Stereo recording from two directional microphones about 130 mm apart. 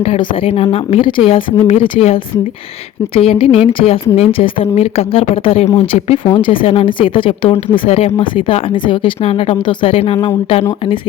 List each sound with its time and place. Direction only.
0.0 s speech: 45° left (ahead or behind)